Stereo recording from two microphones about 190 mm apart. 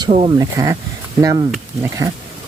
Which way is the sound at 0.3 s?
15° right (ahead or behind).